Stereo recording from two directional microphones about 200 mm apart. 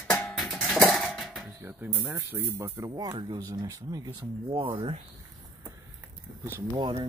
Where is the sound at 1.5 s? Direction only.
15° right (ahead or behind).